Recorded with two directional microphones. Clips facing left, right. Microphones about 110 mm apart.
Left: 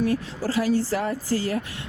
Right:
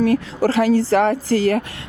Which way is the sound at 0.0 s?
65° right (ahead or behind).